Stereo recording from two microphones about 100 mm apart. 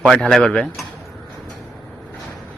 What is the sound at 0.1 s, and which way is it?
Speech, 5° left (ahead or behind).